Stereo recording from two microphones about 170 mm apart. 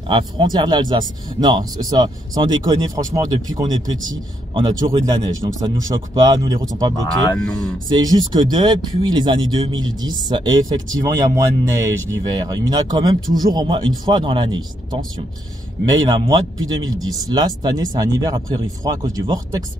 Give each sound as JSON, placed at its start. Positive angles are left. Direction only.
{"t": 0.1, "sound": "speech", "side_deg": -25}
{"t": 7.1, "sound": "speech", "side_deg": 5}
{"t": 7.9, "sound": "speech", "side_deg": -20}